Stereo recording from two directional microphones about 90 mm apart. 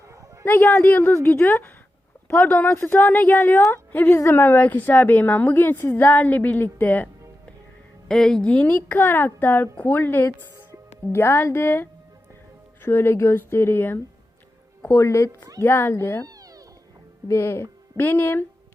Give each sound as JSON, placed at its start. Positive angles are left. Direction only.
{"t": 0.4, "sound": "a woman's voice", "side_deg": 20}
{"t": 8.0, "sound": "a woman's voice", "side_deg": 5}
{"t": 14.8, "sound": "a woman's voice", "side_deg": 35}
{"t": 16.2, "sound": "a sound", "side_deg": -40}
{"t": 17.2, "sound": "speech", "side_deg": 30}